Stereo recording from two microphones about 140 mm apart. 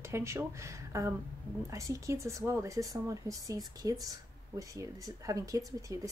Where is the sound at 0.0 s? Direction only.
20° right (ahead or behind).